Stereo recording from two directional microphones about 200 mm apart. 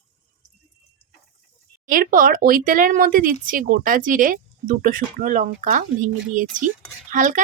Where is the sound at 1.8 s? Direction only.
45° right (ahead or behind).